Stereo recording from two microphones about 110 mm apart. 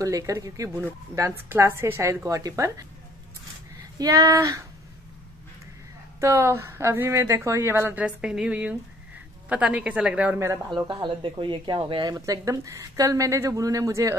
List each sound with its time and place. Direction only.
0.0 s a woman's voice: 30° right (ahead or behind)
4.0 s a woman's voice: 30° right (ahead or behind)
6.2 s a woman's voice: 25° right (ahead or behind); by 10.4 s 10° right (ahead or behind)
10.7 s speech: 45° right (ahead or behind)
12.0 s speech: 35° right (ahead or behind)